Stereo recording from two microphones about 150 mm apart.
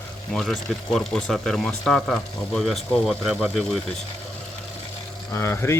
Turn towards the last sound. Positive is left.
turn(degrees=15)  # may be behind; listen again after turning